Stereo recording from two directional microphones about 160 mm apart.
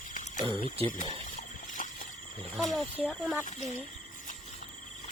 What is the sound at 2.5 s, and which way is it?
Speech, centre (ahead or behind).